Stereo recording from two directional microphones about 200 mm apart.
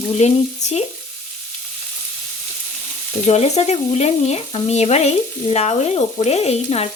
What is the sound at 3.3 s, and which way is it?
Frying, 35° left (ahead or behind).